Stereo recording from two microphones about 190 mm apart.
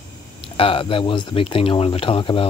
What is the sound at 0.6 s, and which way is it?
Speech, 30° left (ahead or behind).